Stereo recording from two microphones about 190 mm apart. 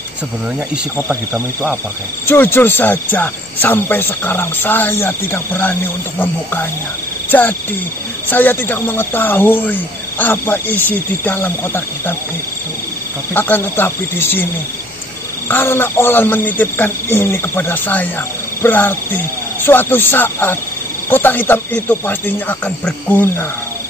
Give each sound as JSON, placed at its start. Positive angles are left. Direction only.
{"t": 0.9, "sound": "speech", "side_deg": -10}
{"t": 2.2, "sound": "speech", "side_deg": 10}
{"t": 13.3, "sound": "speech", "side_deg": 10}